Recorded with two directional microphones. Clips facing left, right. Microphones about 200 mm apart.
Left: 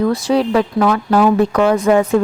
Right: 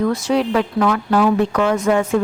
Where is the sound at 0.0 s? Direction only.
35° left (ahead or behind).